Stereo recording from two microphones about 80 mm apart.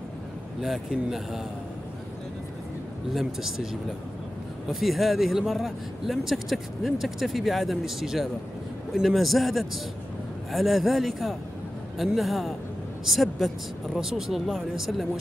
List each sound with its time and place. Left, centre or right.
0.6 s speech: centre
3.1 s speech: centre
4.6 s speech: centre